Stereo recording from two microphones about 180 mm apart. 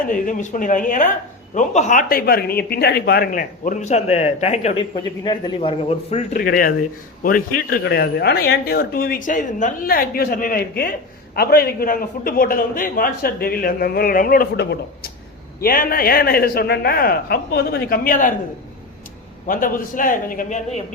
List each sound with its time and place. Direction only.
0.0 s a man's voice: 45° left (ahead or behind)
3.6 s speech: 40° left (ahead or behind)
6.3 s a man's voice: 50° left (ahead or behind)
15.6 s speech: 55° left (ahead or behind)
19.5 s a man's voice: 50° left (ahead or behind)